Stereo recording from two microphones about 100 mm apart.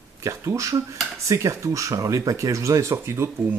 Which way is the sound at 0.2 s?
30° right (ahead or behind).